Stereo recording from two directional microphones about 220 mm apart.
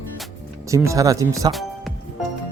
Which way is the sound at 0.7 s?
15° right (ahead or behind).